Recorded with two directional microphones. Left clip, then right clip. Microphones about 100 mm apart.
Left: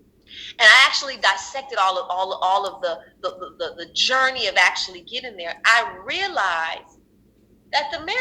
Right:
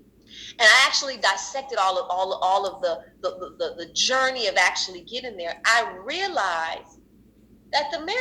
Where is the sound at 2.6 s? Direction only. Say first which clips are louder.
Even; 45° left (ahead or behind).